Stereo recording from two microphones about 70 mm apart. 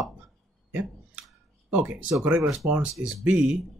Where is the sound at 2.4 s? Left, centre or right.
Centre.